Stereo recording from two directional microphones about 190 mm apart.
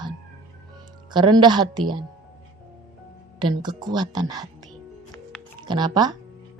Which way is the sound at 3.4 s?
25° right (ahead or behind).